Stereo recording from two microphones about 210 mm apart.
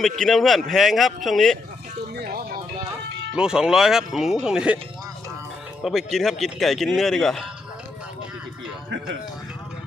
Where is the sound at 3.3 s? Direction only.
5° right (ahead or behind).